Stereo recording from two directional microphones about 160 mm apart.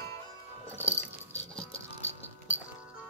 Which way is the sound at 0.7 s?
10° left (ahead or behind).